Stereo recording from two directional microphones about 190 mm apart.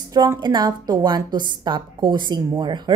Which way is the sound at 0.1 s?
20° right (ahead or behind).